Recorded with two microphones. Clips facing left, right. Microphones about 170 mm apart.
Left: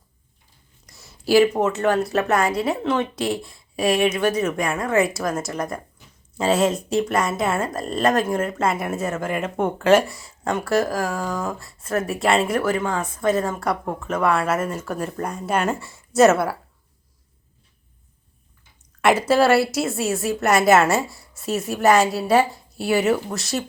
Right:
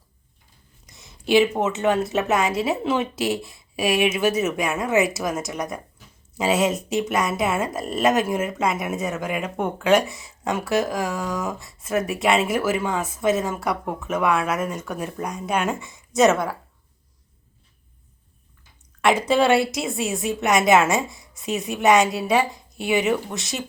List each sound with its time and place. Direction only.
0.9 s speech: centre (ahead or behind)
3.3 s speech: 25° right (ahead or behind)
3.8 s speech: 5° right (ahead or behind)
19.0 s speech: 5° left (ahead or behind)